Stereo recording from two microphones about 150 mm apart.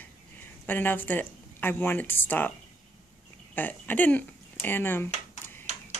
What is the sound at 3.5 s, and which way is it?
Speech, 10° left (ahead or behind).